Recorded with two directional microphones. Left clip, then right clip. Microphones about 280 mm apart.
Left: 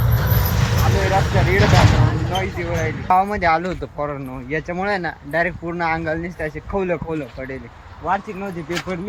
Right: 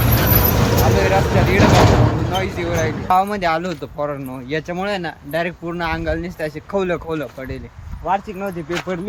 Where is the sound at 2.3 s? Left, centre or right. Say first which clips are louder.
Right 2 dB; centre.